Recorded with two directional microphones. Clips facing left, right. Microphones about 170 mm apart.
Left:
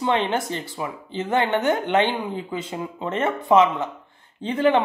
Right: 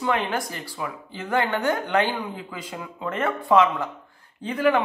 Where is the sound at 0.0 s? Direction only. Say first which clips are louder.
Left 3 dB; 25° left (ahead or behind).